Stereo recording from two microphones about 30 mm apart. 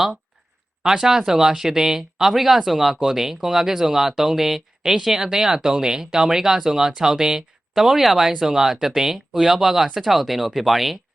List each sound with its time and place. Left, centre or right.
0.9 s speech: centre
2.3 s speech: centre